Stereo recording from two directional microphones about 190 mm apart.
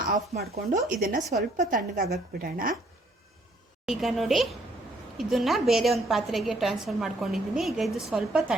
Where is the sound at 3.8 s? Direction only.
Centre (ahead or behind).